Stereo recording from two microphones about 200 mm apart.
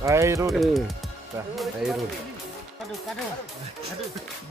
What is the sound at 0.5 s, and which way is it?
Speech, centre (ahead or behind).